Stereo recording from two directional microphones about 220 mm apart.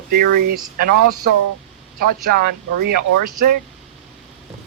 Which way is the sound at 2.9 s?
40° right (ahead or behind).